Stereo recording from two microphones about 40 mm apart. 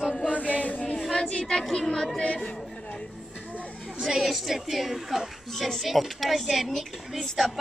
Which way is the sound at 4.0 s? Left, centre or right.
Centre.